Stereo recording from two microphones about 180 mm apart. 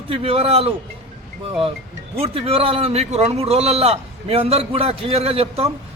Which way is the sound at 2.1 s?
35° right (ahead or behind).